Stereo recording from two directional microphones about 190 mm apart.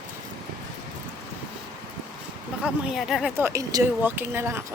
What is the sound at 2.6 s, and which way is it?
Speech, centre (ahead or behind).